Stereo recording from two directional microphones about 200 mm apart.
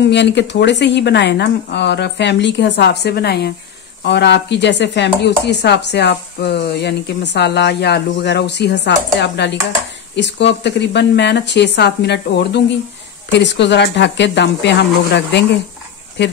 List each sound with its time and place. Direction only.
0.1 s speech: 60° left (ahead or behind)